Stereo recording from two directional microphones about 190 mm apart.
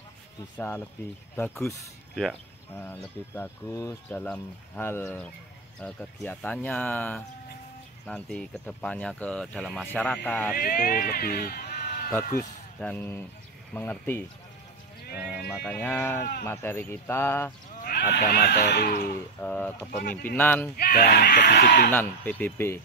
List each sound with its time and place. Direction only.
0.6 s speech: 10° left (ahead or behind)
10.5 s speech: 50° left (ahead or behind)
12.4 s speech: 10° left (ahead or behind)
15.1 s speech: centre (ahead or behind)
17.8 s speech: 55° left (ahead or behind)
19.4 s speech: 10° left (ahead or behind)
20.7 s speech: 50° left (ahead or behind)
21.9 s speech: 10° left (ahead or behind)